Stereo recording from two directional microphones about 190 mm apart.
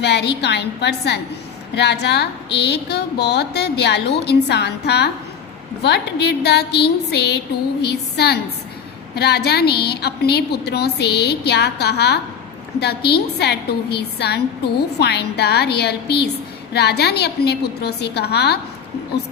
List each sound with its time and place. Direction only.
0.0 s a woman's voice: 60° left (ahead or behind)